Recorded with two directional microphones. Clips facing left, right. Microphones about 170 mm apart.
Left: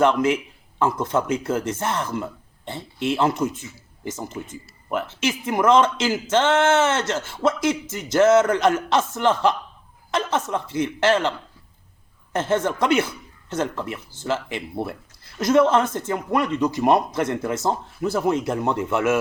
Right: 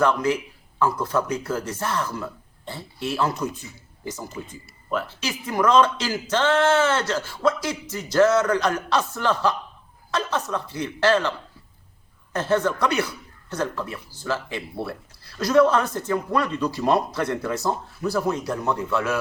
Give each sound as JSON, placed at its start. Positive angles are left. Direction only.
{"t": 0.0, "sound": "speech", "side_deg": 20}
{"t": 4.9, "sound": "speech", "side_deg": 20}